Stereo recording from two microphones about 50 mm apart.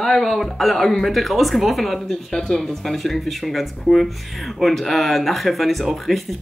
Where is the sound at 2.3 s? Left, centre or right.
Centre.